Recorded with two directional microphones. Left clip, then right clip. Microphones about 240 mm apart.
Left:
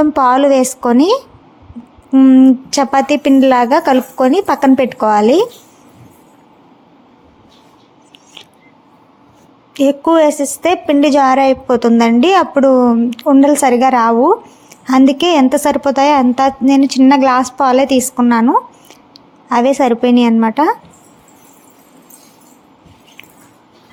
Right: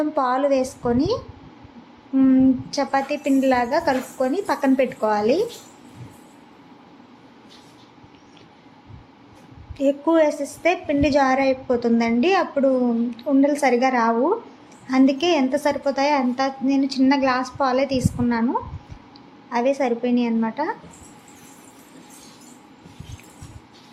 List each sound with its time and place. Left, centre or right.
0.0 s a woman's voice: left
9.7 s a woman's voice: left